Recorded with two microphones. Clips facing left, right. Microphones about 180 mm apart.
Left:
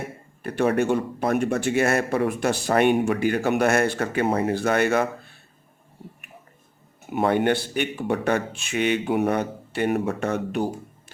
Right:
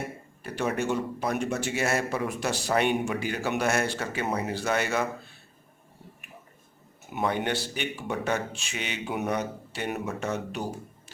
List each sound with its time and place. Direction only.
0.4 s speech: 55° left (ahead or behind)
7.1 s speech: 55° left (ahead or behind)